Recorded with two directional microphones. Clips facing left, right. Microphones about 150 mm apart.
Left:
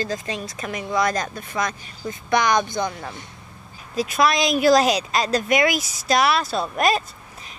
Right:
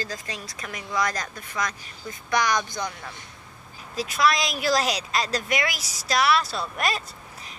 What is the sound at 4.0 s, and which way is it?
A woman's voice, 20° left (ahead or behind).